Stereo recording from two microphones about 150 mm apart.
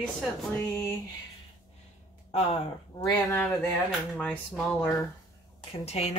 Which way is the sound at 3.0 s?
30° left (ahead or behind).